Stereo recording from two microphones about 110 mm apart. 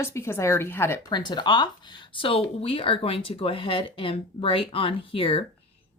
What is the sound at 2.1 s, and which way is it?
Speech, 55° left (ahead or behind).